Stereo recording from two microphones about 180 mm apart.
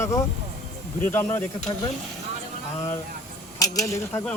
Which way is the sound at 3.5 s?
20° left (ahead or behind).